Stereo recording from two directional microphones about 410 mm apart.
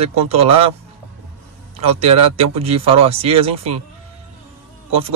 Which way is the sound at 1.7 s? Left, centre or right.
Centre.